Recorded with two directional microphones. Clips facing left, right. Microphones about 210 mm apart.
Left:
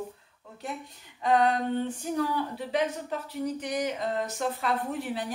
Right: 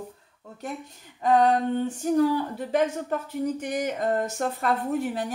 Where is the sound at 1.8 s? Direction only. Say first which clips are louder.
Right 7 dB; 45° right (ahead or behind).